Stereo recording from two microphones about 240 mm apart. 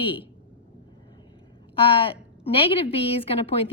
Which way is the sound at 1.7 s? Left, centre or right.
Left.